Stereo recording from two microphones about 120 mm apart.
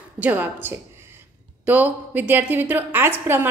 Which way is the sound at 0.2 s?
15° right (ahead or behind).